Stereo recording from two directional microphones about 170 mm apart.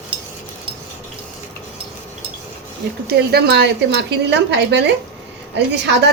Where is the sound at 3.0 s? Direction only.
70° right (ahead or behind).